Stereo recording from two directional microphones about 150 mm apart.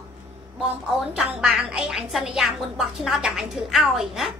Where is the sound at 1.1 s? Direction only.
5° right (ahead or behind).